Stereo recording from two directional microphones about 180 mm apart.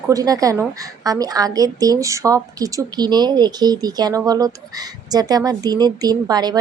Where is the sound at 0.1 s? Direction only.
20° right (ahead or behind).